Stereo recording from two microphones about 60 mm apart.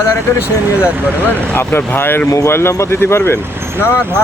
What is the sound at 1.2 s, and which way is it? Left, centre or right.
Speech, left.